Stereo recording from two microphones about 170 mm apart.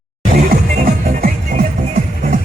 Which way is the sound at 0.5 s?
55° right (ahead or behind).